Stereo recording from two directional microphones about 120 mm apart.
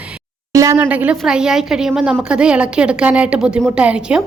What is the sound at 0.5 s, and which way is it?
Speech, 25° right (ahead or behind).